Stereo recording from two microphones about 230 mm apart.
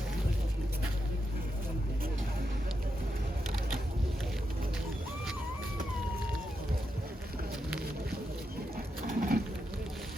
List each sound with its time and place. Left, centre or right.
9.0 s sewing machine: right